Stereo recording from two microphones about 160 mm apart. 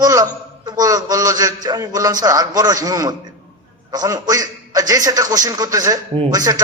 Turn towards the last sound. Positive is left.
turn(degrees=-25)  # may be behind; listen again after turning